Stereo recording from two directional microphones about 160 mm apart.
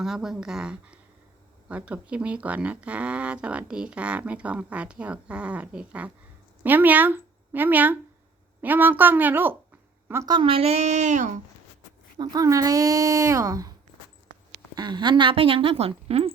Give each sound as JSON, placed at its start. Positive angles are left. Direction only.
{"t": 0.0, "sound": "a woman's voice", "side_deg": -5}
{"t": 10.3, "sound": "speech", "side_deg": -35}
{"t": 12.1, "sound": "speech", "side_deg": -25}
{"t": 14.8, "sound": "a woman's voice", "side_deg": -25}